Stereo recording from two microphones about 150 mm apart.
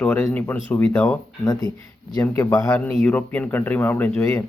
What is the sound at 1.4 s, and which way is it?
Speech, 25° left (ahead or behind).